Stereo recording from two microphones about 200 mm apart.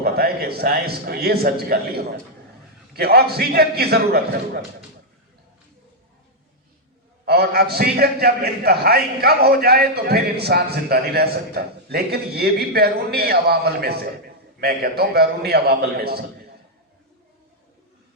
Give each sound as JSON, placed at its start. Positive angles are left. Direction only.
{"t": 0.0, "sound": "a man's voice", "side_deg": -50}
{"t": 7.3, "sound": "a man's voice", "side_deg": -50}